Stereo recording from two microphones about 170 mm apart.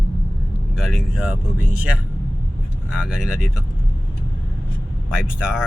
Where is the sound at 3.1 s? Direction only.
5° right (ahead or behind).